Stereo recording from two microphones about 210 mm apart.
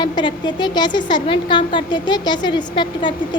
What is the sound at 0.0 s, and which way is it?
A child's voice, 20° left (ahead or behind).